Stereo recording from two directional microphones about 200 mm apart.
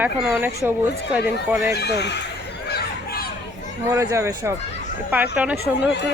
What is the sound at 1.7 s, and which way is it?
Speech, 55° left (ahead or behind).